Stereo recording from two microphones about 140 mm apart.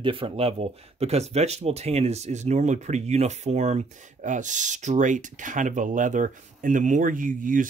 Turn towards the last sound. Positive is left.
turn(degrees=-70)  # may be behind; listen again after turning